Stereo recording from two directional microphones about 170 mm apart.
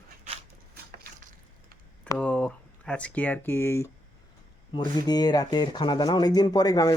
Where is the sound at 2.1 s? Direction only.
5° left (ahead or behind).